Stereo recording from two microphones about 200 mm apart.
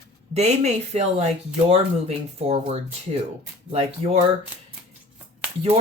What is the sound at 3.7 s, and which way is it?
Speech, 30° right (ahead or behind).